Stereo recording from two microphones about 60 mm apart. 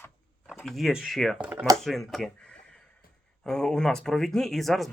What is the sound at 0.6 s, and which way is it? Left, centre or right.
Speech, centre.